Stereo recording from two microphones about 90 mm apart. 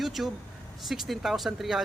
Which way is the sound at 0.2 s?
5° right (ahead or behind).